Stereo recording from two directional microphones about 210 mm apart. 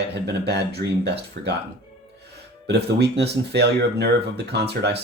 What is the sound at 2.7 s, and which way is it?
Speech, 50° right (ahead or behind).